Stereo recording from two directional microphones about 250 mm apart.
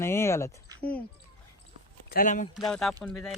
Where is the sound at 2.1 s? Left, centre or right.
Left.